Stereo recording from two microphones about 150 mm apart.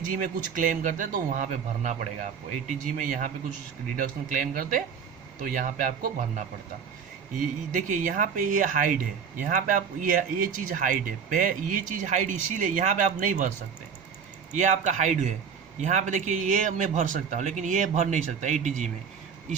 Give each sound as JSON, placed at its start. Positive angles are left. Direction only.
{"t": 0.0, "sound": "speech", "side_deg": -65}
{"t": 14.5, "sound": "a man's voice", "side_deg": -55}